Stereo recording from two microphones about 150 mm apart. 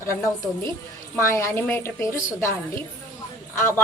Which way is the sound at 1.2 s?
20° left (ahead or behind).